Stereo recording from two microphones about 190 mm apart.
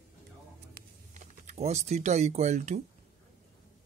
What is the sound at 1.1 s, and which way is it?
Speech, 35° right (ahead or behind).